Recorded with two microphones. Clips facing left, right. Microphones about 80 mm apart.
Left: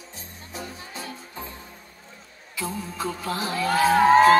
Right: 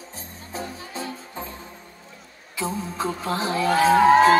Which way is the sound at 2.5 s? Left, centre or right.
Right.